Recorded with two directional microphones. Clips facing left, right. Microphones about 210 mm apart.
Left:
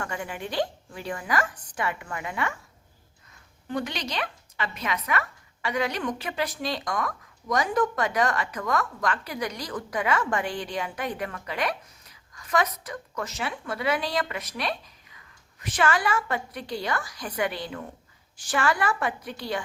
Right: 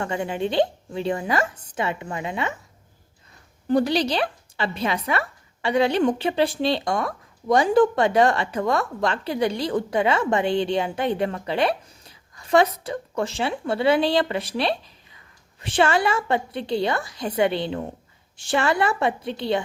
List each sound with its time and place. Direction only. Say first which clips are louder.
0.0 s a woman's voice: right 8 dB; 25° right (ahead or behind)
3.7 s a woman's voice: right 11 dB; 35° right (ahead or behind)